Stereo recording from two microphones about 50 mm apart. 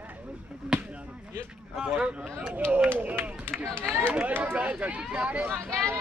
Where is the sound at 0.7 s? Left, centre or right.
Centre.